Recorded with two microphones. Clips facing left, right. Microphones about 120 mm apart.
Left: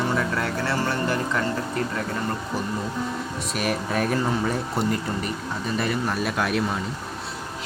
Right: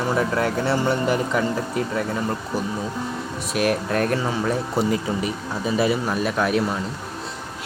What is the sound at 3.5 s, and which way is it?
Speech, centre (ahead or behind).